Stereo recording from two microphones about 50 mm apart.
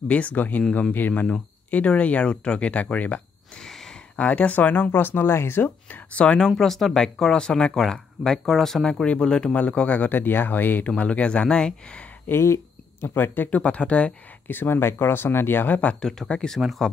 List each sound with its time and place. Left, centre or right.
0.1 s speech: left
1.2 s speech: left
3.5 s a sound: centre
4.2 s speech: left
6.5 s speech: centre
8.8 s speech: centre; by 10.9 s left
11.0 s speech: left
12.3 s speech: left
13.1 s speech: left
13.5 s speech: left
14.5 s speech: left
16.0 s speech: centre
16.5 s speech: centre